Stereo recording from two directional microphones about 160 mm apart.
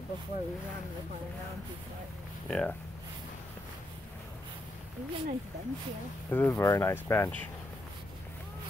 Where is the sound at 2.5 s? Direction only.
5° left (ahead or behind).